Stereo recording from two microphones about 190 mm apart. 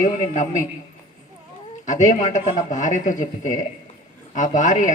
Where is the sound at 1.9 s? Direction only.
40° left (ahead or behind).